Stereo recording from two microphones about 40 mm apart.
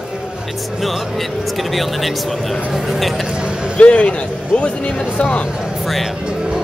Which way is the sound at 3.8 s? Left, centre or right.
Left.